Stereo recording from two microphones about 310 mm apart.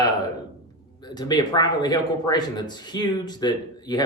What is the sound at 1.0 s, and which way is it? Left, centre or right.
Speech, centre.